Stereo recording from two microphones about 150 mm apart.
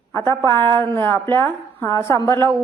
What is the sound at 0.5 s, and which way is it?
Speech, 30° right (ahead or behind).